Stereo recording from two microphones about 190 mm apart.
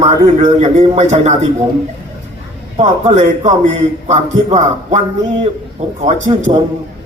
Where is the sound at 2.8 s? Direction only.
35° right (ahead or behind).